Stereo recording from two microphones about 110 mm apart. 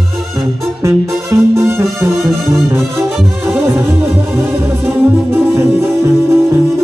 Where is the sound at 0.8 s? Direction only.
25° right (ahead or behind).